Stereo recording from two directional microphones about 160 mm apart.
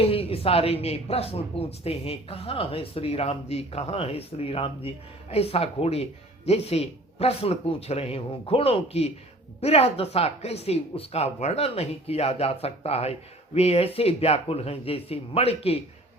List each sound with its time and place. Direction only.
0.0 s speech: 35° left (ahead or behind)